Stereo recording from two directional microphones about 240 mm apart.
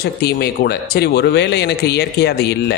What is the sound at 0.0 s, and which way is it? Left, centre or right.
A man's voice, left.